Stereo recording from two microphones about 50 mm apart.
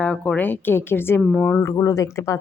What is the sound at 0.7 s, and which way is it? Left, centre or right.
Speech, left.